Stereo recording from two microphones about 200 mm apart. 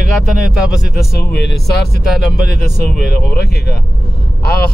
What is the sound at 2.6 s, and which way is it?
Speech, 50° left (ahead or behind).